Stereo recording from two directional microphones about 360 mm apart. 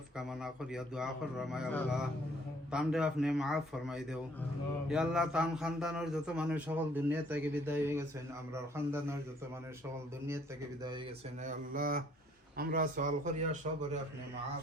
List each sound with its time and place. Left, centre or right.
0.2 s a man's voice: centre
11.4 s speech: right